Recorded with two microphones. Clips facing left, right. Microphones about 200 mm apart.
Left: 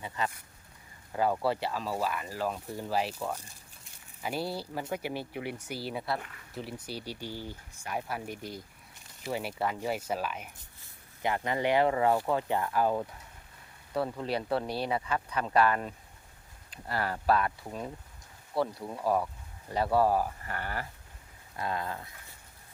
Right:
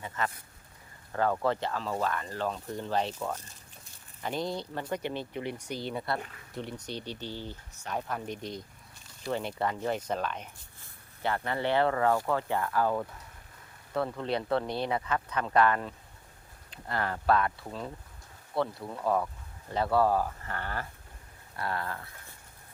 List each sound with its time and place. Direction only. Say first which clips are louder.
0.2 s speech: right 1 dB; 15° left (ahead or behind)
16.9 s speech: right 1 dB; 10° left (ahead or behind)